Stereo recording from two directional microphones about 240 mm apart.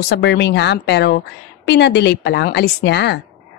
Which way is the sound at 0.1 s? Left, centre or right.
Left.